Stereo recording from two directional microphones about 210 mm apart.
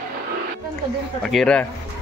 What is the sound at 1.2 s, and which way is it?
Speech, centre (ahead or behind).